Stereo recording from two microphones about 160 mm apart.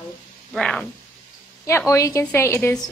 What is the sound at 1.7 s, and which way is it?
A woman's voice, 20° left (ahead or behind).